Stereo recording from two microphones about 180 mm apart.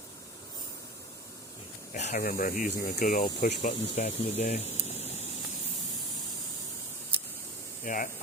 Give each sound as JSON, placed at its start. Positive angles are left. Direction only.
{"t": 1.9, "sound": "a sound", "side_deg": 40}
{"t": 2.2, "sound": "speech", "side_deg": 55}
{"t": 7.9, "sound": "speech", "side_deg": 50}